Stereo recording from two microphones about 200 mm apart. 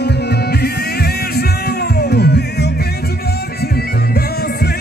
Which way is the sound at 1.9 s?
55° left (ahead or behind).